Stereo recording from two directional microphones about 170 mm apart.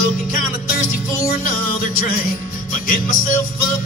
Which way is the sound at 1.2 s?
60° left (ahead or behind).